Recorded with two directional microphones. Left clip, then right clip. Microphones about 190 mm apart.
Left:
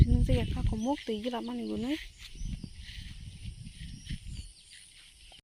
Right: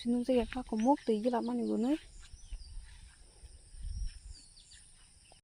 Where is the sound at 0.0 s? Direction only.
15° right (ahead or behind).